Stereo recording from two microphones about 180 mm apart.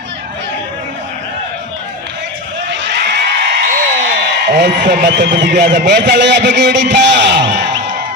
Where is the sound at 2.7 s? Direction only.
75° right (ahead or behind).